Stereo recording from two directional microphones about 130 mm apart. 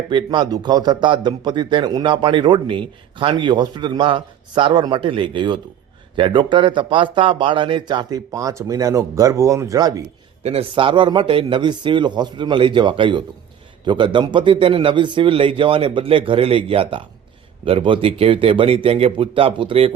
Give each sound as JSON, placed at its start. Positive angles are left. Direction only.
{"t": 0.1, "sound": "a man's voice", "side_deg": -35}
{"t": 10.4, "sound": "a man's voice", "side_deg": -50}